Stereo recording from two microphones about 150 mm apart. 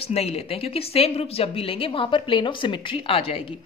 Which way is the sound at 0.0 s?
40° left (ahead or behind).